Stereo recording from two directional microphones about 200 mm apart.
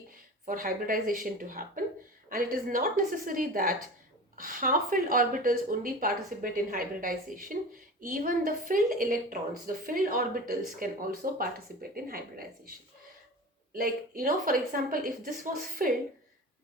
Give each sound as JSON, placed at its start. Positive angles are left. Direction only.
{"t": 0.4, "sound": "speech", "side_deg": -45}
{"t": 13.7, "sound": "speech", "side_deg": -45}